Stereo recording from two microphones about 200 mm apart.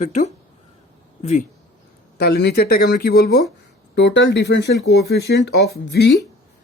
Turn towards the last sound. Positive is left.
turn(degrees=60)  # may be behind; listen again after turning